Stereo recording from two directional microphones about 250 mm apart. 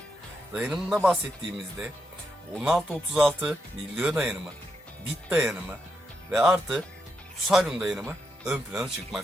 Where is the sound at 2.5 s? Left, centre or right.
Centre.